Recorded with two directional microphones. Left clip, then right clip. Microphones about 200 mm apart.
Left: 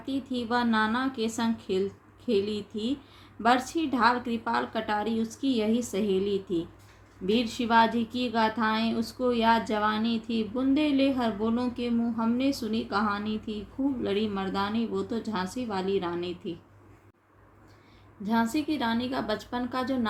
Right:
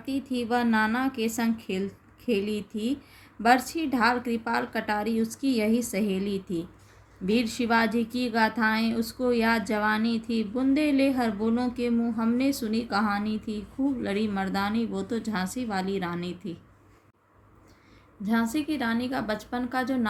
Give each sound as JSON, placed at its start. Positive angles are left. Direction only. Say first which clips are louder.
{"t": 0.0, "sound": "music", "louder": "right 1 dB", "side_deg": -60}
{"t": 0.3, "sound": "speech", "louder": "right 1 dB", "side_deg": -25}
{"t": 3.4, "sound": "speech", "louder": "right 2 dB", "side_deg": -25}
{"t": 18.2, "sound": "speech", "louder": "even", "side_deg": -20}